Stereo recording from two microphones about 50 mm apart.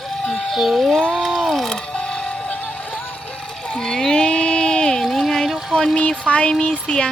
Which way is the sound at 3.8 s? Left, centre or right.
Centre.